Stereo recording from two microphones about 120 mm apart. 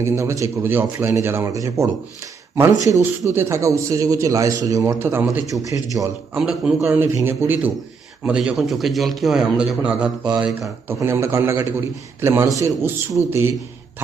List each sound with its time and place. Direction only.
0.0 s a man's voice: 25° right (ahead or behind)
5.5 s a man's voice: 25° right (ahead or behind)
6.3 s a man's voice: 5° right (ahead or behind)
6.8 s a man's voice: 20° right (ahead or behind)
10.6 s a man's voice: 20° right (ahead or behind)